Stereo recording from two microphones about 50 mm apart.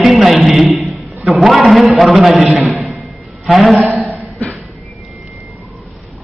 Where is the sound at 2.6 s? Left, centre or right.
Centre.